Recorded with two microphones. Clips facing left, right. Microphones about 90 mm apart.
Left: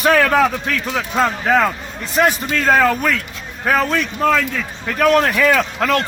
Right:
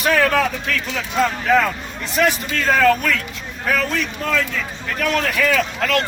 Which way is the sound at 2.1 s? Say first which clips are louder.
Left 3 dB; 35° left (ahead or behind).